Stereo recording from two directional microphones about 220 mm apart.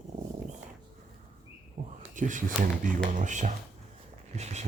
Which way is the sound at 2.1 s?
35° right (ahead or behind).